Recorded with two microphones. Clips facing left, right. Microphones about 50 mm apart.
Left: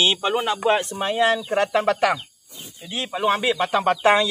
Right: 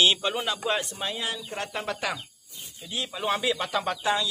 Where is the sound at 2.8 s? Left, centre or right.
Left.